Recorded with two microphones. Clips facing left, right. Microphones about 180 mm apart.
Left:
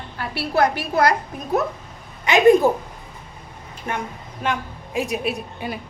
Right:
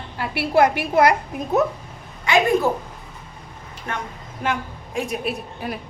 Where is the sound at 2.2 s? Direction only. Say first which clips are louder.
Left 5 dB; 20° left (ahead or behind).